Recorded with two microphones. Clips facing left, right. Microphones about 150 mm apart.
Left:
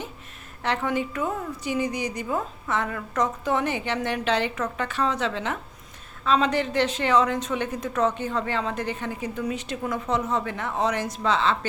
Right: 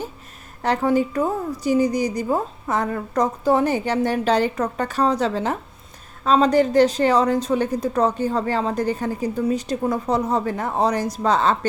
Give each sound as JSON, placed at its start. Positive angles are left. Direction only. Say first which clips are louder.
{"t": 0.6, "sound": "a woman's voice", "louder": "right 7 dB", "side_deg": -40}